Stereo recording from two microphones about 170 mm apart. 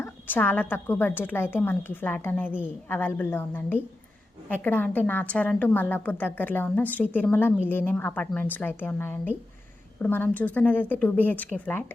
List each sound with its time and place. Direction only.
0.0 s a woman's voice: 10° left (ahead or behind)